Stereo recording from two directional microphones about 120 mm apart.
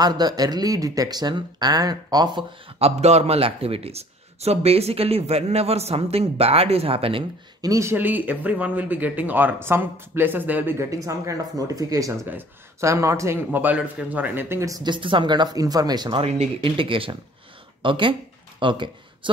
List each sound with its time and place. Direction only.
0.0 s speech: 35° right (ahead or behind)
2.8 s speech: 65° right (ahead or behind)
7.6 s speech: 25° right (ahead or behind)
14.8 s speech: 45° right (ahead or behind)
16.2 s speech: 55° right (ahead or behind)